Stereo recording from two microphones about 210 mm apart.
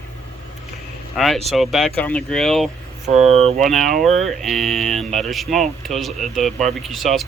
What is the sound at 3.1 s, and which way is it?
Speech, 30° right (ahead or behind).